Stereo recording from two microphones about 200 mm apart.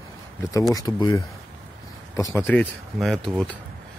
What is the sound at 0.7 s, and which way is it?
Speech, 15° left (ahead or behind).